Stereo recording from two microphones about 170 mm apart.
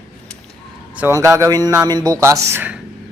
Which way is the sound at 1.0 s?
15° right (ahead or behind).